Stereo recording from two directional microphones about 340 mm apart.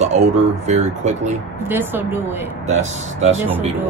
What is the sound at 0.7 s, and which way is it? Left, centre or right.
Speech, centre.